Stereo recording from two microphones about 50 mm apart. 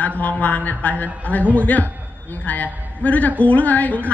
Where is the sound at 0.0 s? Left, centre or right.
Left.